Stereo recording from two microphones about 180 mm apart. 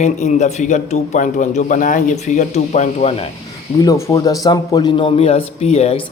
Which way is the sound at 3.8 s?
15° left (ahead or behind).